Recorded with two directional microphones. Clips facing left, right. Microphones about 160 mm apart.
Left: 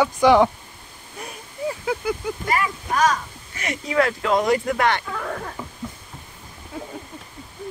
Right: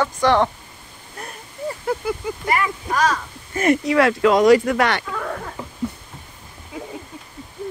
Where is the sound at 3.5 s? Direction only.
55° right (ahead or behind); by 5.0 s 80° right.